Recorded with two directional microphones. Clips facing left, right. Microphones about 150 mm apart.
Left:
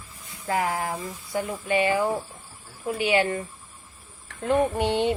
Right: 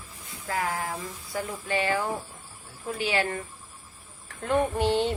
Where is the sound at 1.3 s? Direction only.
15° left (ahead or behind).